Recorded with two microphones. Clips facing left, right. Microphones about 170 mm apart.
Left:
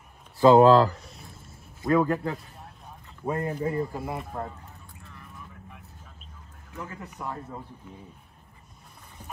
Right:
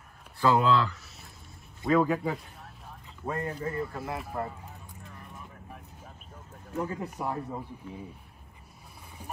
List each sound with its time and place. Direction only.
0.4 s speech: 25° left (ahead or behind)
0.7 s speech: 40° left (ahead or behind)
1.8 s a man's voice: centre (ahead or behind)
3.4 s speech: 15° left (ahead or behind)
3.9 s a man's voice: 5° left (ahead or behind)
6.7 s speech: 35° right (ahead or behind)
7.2 s speech: 10° right (ahead or behind)